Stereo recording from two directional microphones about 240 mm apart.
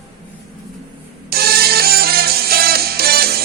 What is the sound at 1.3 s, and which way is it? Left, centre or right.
Music, right.